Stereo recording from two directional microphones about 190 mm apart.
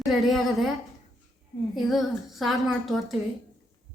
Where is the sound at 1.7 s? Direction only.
Centre (ahead or behind).